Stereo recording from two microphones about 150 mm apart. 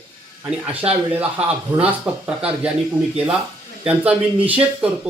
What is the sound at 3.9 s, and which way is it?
Speech, 10° right (ahead or behind).